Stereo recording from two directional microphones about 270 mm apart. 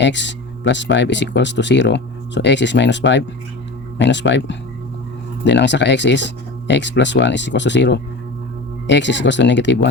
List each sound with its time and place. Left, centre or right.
0.0 s speech: left